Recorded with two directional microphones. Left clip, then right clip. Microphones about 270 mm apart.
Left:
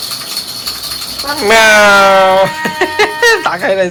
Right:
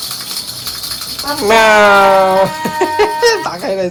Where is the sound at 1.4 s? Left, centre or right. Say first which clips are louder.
Left 2 dB; centre.